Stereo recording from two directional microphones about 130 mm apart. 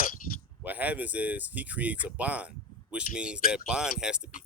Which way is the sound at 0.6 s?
10° right (ahead or behind).